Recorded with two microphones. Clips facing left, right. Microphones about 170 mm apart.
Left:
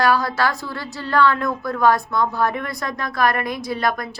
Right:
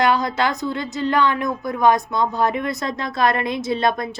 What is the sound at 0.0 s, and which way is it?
A woman's voice, 20° right (ahead or behind).